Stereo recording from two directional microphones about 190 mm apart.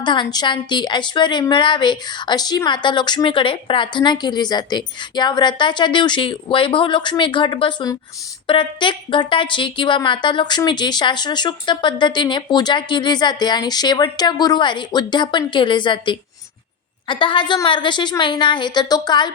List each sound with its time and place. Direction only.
0.0 s a woman's voice: 25° left (ahead or behind)